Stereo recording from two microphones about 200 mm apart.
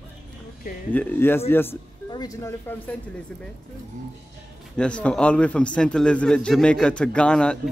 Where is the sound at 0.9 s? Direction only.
10° left (ahead or behind).